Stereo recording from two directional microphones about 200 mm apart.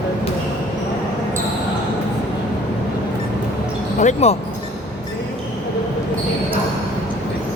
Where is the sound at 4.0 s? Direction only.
35° left (ahead or behind).